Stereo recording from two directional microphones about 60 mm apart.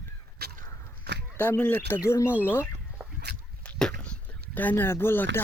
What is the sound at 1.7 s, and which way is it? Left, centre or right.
Speech, left.